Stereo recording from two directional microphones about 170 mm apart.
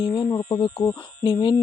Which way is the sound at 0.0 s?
30° left (ahead or behind).